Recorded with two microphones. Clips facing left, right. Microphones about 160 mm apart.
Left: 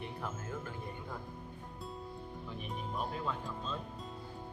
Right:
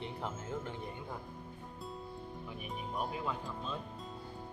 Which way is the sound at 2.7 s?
10° right (ahead or behind).